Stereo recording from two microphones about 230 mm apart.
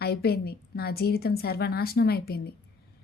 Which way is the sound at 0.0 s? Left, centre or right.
Left.